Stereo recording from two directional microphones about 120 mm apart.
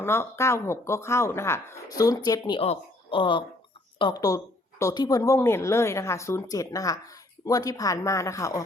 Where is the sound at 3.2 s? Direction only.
45° left (ahead or behind).